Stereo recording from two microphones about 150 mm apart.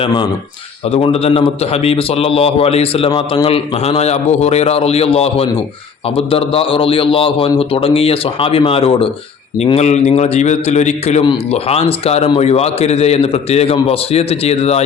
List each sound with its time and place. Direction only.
0.0 s a man's voice: 35° left (ahead or behind)
11.2 s speech: 35° left (ahead or behind)